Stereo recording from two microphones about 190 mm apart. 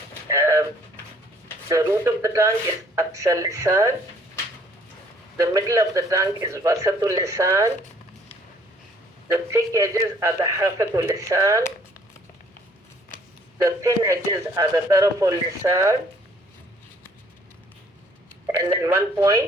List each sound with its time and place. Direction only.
0.3 s pigeon: 15° right (ahead or behind)
1.7 s a man's voice: 15° right (ahead or behind)
5.4 s a man's voice: 15° right (ahead or behind)
9.3 s a man's voice: 15° right (ahead or behind)
13.6 s a man's voice: 15° right (ahead or behind)
18.4 s a man's voice: 15° right (ahead or behind)